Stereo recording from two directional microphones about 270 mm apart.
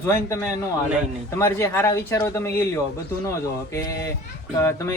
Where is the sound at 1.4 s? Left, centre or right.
Centre.